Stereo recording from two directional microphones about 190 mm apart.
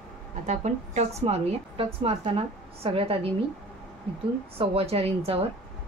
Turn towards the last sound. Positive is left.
turn(degrees=-30)  # may be behind; listen again after turning